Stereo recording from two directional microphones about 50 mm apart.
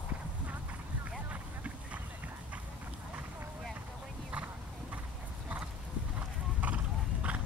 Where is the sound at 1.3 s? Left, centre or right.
Right.